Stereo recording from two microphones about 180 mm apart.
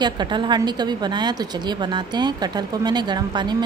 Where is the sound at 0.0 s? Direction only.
25° right (ahead or behind).